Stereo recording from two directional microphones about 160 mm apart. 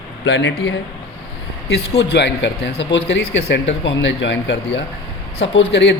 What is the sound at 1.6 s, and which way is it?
Speech, 90° left.